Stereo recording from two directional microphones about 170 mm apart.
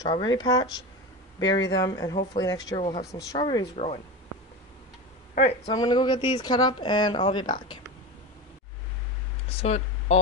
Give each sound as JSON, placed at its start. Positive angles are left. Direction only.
{"t": 0.0, "sound": "speech", "side_deg": 25}
{"t": 5.7, "sound": "speech", "side_deg": 25}
{"t": 9.6, "sound": "speech", "side_deg": 40}